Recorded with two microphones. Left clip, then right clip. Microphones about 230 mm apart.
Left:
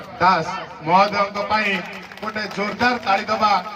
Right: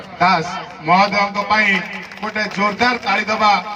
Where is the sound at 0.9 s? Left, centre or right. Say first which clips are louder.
Right 1 dB; right.